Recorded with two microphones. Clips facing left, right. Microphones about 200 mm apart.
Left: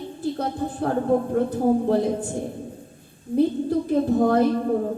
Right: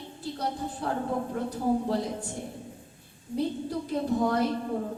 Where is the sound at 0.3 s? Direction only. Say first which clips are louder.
Left 6 dB; 50° left (ahead or behind).